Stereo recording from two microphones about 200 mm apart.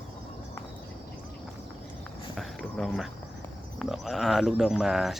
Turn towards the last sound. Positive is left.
turn(degrees=0)  # may be behind; listen again after turning